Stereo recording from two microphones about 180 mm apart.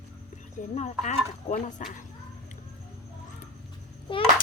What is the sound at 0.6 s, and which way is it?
Speech, 40° left (ahead or behind).